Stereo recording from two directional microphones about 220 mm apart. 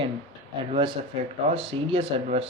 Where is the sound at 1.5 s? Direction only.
25° right (ahead or behind).